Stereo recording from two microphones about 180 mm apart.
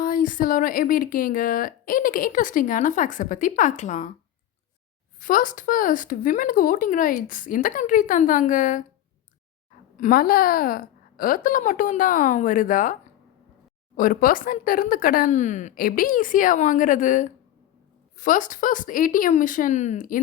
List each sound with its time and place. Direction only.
0.0 s speech: 50° left (ahead or behind)
5.2 s speech: 45° left (ahead or behind)
10.0 s speech: 50° left (ahead or behind)